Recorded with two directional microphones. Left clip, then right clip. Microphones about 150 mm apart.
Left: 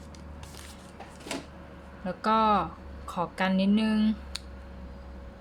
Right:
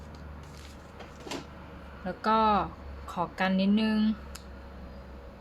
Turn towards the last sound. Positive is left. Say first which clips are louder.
# left 1 dB
turn(degrees=10)  # may be behind; listen again after turning